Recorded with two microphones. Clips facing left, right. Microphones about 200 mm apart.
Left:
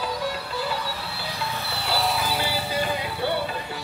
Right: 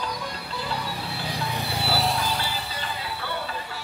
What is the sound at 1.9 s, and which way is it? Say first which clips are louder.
Music: left 2 dB; centre (ahead or behind).